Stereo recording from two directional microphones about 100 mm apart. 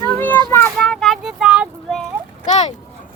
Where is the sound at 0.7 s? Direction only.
5° left (ahead or behind).